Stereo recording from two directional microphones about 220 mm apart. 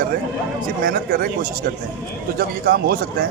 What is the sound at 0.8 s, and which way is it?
Speech, 40° right (ahead or behind).